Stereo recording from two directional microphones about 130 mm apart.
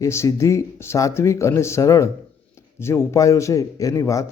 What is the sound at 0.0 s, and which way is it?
Speech, 20° left (ahead or behind).